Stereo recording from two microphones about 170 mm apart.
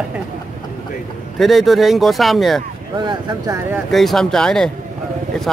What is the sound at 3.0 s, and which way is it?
Speech, 25° right (ahead or behind).